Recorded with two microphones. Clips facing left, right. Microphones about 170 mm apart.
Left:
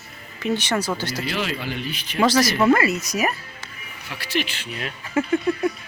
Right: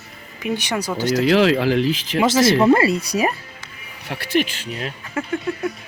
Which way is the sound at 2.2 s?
25° right (ahead or behind).